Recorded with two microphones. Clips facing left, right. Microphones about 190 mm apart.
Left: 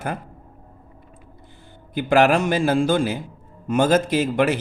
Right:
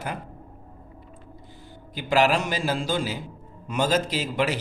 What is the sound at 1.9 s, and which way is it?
A man's voice, 55° left (ahead or behind).